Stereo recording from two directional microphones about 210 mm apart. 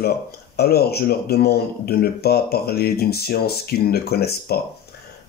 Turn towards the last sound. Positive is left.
turn(degrees=50)  # may be behind; listen again after turning